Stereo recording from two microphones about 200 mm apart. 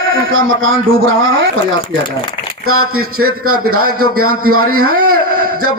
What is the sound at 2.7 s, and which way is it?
A man's voice, 90° right.